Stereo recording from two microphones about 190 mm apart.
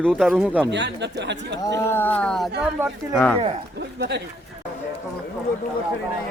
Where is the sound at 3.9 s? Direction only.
60° right (ahead or behind).